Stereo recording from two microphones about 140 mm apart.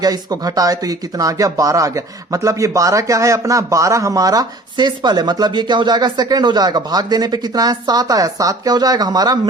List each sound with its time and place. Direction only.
0.0 s speech: 25° right (ahead or behind)